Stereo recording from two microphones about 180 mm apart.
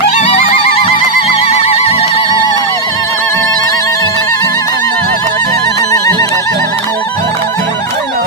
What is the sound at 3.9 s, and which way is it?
Music, 15° left (ahead or behind).